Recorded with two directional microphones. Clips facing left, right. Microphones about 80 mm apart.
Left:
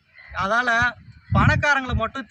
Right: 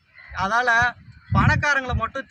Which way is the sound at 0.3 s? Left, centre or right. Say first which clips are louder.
Right 1 dB; centre.